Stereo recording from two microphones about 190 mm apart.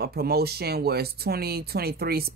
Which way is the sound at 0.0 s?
55° right (ahead or behind).